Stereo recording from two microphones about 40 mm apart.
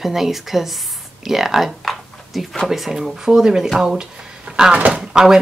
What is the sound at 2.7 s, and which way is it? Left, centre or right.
Speech, centre.